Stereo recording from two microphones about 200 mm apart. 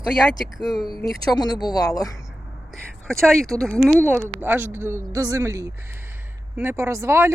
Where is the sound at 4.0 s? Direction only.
10° right (ahead or behind).